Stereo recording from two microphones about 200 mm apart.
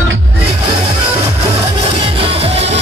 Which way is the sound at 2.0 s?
25° right (ahead or behind).